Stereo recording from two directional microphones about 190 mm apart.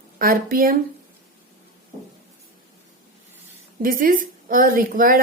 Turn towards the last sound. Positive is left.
turn(degrees=-45)  # may be behind; listen again after turning